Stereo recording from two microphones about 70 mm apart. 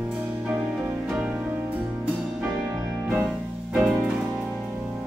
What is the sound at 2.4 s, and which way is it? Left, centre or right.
Music, right.